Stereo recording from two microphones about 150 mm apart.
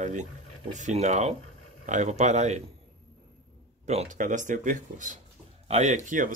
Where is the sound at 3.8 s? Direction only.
50° right (ahead or behind).